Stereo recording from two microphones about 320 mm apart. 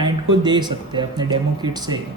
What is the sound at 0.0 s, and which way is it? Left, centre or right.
Speech, centre.